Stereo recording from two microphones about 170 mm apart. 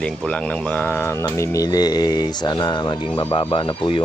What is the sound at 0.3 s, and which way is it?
Speech, 5° left (ahead or behind).